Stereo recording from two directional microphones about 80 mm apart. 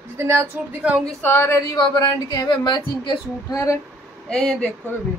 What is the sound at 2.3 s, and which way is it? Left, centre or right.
A woman's voice, left.